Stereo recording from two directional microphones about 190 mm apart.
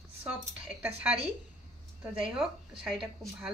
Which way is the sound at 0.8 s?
5° right (ahead or behind).